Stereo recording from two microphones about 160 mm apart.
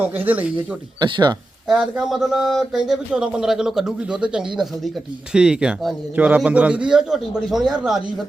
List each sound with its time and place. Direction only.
0.5 s speech: 30° right (ahead or behind)
1.6 s speech: 5° right (ahead or behind)